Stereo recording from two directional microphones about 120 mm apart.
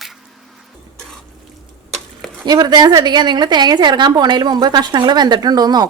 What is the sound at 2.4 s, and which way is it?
A woman's voice, 35° right (ahead or behind).